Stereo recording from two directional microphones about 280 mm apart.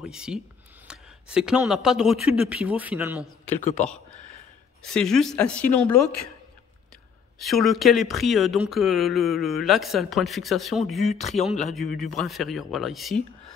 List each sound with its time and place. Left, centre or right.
0.0 s speech: centre
7.3 s speech: centre
11.1 s speech: left
11.6 s speech: centre